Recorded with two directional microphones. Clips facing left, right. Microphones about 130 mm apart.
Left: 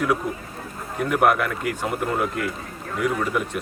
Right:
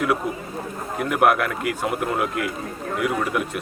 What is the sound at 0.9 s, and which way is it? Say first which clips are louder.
Speech: even; 5° right (ahead or behind).